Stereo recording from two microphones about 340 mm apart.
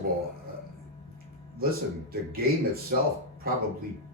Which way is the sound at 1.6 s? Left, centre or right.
Right.